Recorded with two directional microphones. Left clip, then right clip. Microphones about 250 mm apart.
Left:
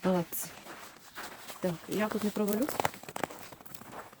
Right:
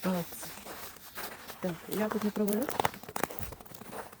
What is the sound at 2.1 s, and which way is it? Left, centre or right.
Speech, centre.